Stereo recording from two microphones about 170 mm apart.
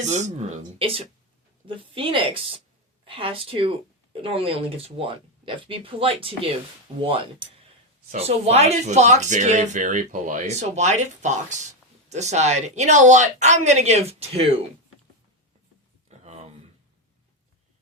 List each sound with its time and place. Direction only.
0.0 s speech: 45° right (ahead or behind)
0.8 s speech: 35° right (ahead or behind)
16.0 s a sound: 40° right (ahead or behind)